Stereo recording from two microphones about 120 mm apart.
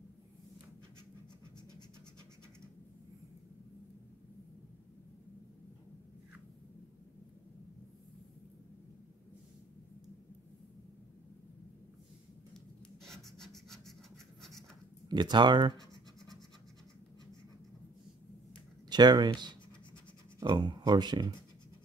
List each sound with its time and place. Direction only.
13.0 s a sound: 5° left (ahead or behind)
15.0 s speech: 35° right (ahead or behind)
18.9 s speech: 35° right (ahead or behind)